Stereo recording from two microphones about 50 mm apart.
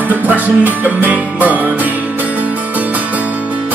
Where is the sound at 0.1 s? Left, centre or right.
Right.